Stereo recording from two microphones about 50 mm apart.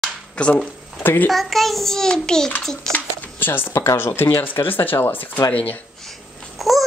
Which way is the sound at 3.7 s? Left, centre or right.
Left.